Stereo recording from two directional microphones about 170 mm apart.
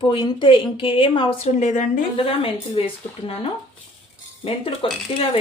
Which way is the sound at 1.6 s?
45° left (ahead or behind).